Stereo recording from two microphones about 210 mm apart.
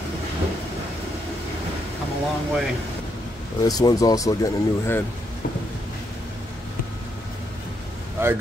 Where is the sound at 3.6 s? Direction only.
15° left (ahead or behind).